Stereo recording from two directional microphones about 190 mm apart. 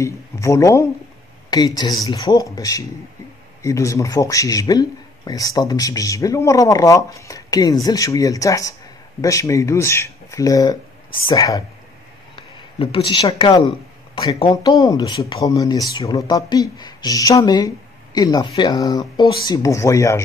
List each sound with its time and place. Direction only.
0.0 s a man's voice: 15° left (ahead or behind)